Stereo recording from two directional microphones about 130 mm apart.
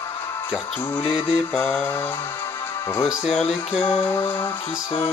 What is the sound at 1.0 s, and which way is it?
Mantra, 5° left (ahead or behind).